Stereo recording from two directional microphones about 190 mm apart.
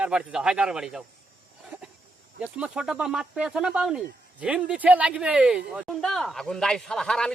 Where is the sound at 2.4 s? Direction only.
5° right (ahead or behind).